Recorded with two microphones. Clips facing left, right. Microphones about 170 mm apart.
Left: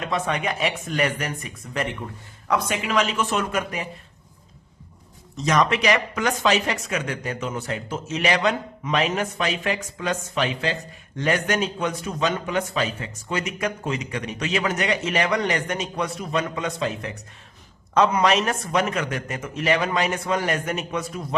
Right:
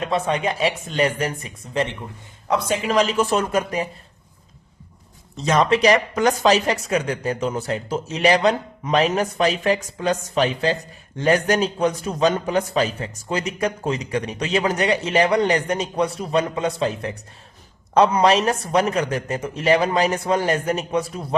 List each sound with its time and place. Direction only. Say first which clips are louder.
0.0 s a man's voice: right 4 dB; 30° right (ahead or behind)
5.4 s a man's voice: right 3 dB; 30° right (ahead or behind)